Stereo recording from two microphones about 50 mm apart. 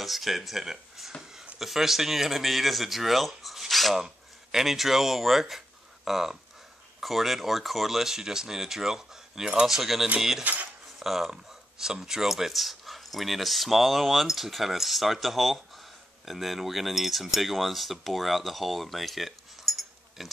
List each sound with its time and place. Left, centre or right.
0.0 s speech: centre
10.4 s cutlery: right
11.0 s speech: centre